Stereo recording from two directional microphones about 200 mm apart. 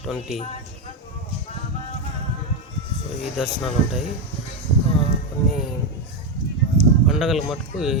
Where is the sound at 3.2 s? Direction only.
Centre (ahead or behind).